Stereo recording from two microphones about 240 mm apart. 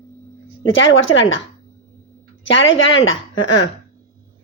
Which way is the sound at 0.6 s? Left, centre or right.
Left.